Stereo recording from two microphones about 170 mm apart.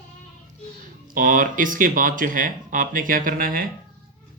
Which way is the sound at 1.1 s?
50° right (ahead or behind).